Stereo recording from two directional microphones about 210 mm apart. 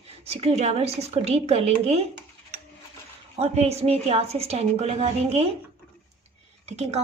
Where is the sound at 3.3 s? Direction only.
30° right (ahead or behind).